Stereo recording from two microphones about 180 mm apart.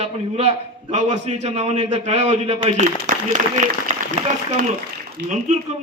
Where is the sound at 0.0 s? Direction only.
35° right (ahead or behind).